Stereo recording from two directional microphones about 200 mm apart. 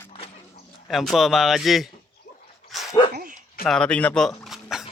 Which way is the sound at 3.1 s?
45° right (ahead or behind).